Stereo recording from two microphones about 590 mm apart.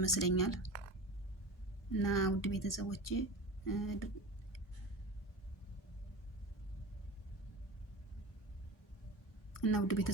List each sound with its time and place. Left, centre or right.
0.0 s speech: left
1.9 s speech: left
9.5 s speech: left